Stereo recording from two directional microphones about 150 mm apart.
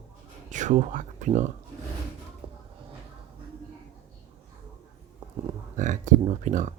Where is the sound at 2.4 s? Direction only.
35° right (ahead or behind).